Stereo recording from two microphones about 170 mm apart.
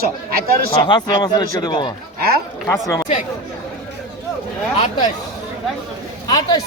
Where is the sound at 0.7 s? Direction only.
25° left (ahead or behind).